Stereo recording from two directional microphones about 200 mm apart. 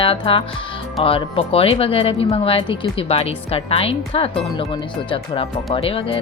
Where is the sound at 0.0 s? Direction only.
25° left (ahead or behind).